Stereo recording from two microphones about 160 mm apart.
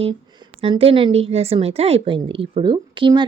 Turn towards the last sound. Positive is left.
turn(degrees=-30)  # may be behind; listen again after turning